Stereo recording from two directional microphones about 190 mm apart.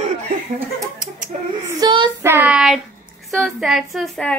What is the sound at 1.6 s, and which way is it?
Child singing, 20° right (ahead or behind).